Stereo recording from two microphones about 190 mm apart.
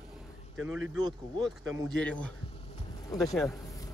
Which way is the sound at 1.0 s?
20° right (ahead or behind).